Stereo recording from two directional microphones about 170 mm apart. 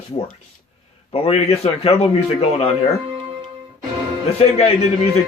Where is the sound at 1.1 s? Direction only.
35° left (ahead or behind).